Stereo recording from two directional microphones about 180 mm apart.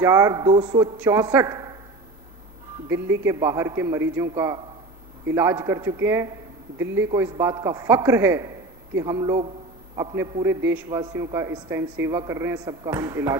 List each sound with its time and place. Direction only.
0.0 s a man's voice: 15° right (ahead or behind)
2.9 s a man's voice: 15° right (ahead or behind)